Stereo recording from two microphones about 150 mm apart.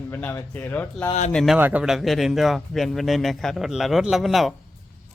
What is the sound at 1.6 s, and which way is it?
A man's voice, 10° right (ahead or behind).